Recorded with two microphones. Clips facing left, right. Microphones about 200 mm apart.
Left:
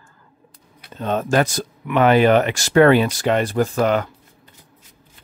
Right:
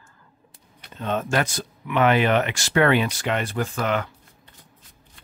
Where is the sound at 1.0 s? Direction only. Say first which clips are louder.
Left 5 dB; 40° left (ahead or behind).